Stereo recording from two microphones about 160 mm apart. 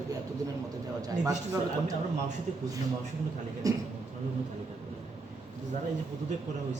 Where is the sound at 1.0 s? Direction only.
20° right (ahead or behind).